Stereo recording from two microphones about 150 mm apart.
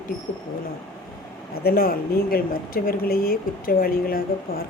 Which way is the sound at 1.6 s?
75° left (ahead or behind).